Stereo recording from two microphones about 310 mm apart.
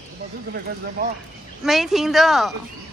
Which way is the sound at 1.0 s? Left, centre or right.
Right.